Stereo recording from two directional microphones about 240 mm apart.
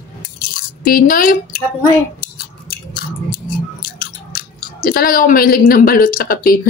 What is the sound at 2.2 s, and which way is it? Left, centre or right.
Chewing, left.